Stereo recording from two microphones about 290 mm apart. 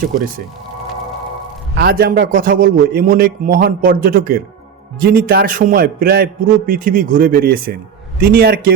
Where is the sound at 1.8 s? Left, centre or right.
Right.